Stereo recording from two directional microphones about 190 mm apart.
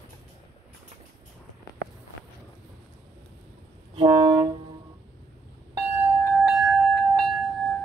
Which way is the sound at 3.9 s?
30° right (ahead or behind).